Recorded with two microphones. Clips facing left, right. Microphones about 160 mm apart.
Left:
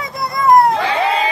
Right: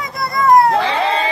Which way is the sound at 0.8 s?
30° right (ahead or behind).